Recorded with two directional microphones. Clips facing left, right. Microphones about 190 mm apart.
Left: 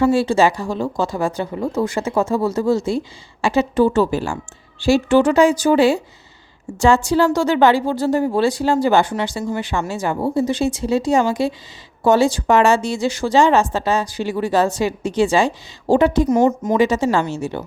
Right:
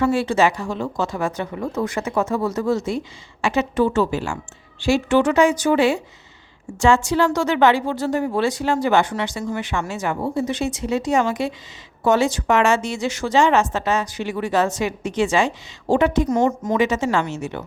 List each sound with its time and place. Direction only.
0.0 s speech: 30° left (ahead or behind)
16.3 s a woman's voice: 20° left (ahead or behind)
16.7 s speech: 35° left (ahead or behind)